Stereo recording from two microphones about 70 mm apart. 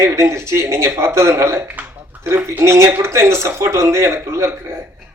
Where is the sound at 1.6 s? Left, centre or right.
Right.